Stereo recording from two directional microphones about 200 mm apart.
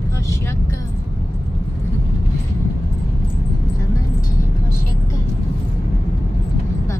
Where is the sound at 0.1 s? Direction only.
15° left (ahead or behind).